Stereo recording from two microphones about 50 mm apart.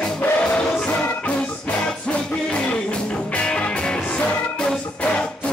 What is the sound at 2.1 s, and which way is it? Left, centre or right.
Music, left.